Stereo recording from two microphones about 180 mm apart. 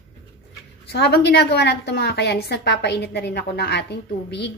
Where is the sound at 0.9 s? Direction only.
65° left (ahead or behind).